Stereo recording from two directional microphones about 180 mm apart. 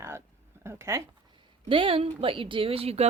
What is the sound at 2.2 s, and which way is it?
Speech, 30° right (ahead or behind).